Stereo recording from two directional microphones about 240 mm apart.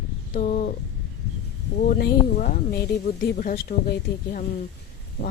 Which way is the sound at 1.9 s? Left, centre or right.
Left.